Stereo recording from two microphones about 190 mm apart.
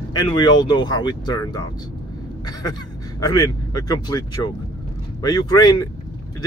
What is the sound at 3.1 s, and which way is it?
Speech, 20° left (ahead or behind).